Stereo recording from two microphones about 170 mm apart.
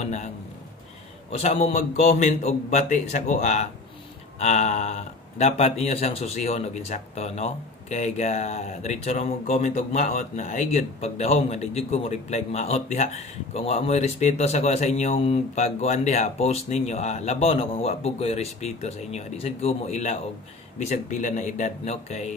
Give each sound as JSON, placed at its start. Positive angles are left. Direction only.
{"t": 0.0, "sound": "a man's voice", "side_deg": 45}
{"t": 1.3, "sound": "a man's voice", "side_deg": 35}